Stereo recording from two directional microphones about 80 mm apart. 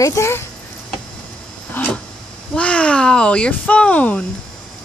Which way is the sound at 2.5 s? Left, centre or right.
Centre.